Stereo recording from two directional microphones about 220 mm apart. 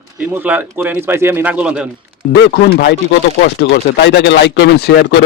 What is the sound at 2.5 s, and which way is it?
Speech, 40° left (ahead or behind).